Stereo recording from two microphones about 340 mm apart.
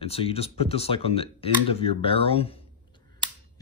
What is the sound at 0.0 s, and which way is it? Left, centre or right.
Speech, centre.